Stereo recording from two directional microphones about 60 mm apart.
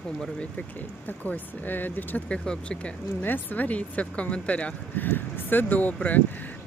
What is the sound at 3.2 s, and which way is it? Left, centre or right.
Speech, left.